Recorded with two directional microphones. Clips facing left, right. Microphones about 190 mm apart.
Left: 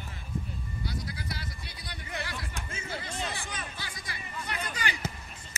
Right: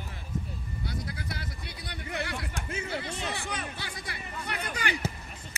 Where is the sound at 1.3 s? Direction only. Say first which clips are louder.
Right 1 dB; 55° right (ahead or behind).